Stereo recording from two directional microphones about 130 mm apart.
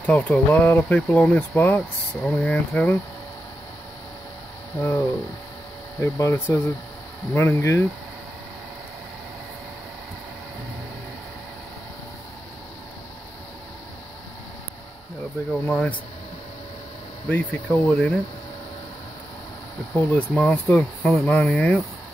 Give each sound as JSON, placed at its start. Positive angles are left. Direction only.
{"t": 0.0, "sound": "speech", "side_deg": 10}
{"t": 4.7, "sound": "speech", "side_deg": 15}
{"t": 15.6, "sound": "speech", "side_deg": 10}
{"t": 17.3, "sound": "speech", "side_deg": 10}
{"t": 20.1, "sound": "speech", "side_deg": 10}
{"t": 21.1, "sound": "speech", "side_deg": 0}